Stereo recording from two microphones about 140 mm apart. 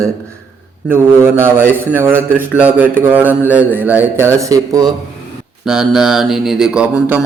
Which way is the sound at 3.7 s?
15° right (ahead or behind).